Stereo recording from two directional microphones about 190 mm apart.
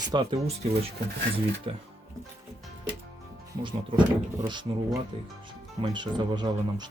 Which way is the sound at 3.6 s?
25° right (ahead or behind).